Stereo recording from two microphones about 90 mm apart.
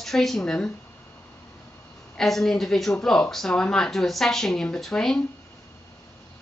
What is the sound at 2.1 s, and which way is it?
Speech, 5° left (ahead or behind).